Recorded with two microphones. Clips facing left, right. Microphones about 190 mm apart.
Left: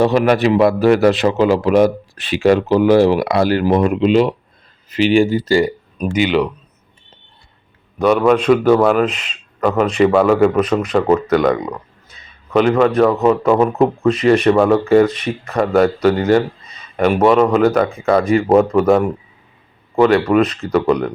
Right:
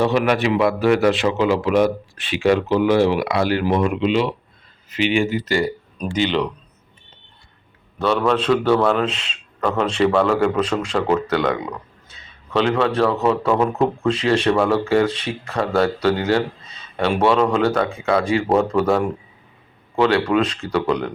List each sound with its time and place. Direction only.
0.0 s a man's voice: 40° left (ahead or behind)
6.0 s a man's voice: 10° left (ahead or behind)
7.9 s a man's voice: 15° left (ahead or behind)
15.2 s speech: 10° right (ahead or behind)
15.5 s a man's voice: 10° left (ahead or behind)
16.3 s a sound: 15° left (ahead or behind)
17.2 s a man's voice: 5° left (ahead or behind)
20.0 s a man's voice: 5° left (ahead or behind)
20.5 s speech: 10° right (ahead or behind)
20.7 s a man's voice: 10° left (ahead or behind)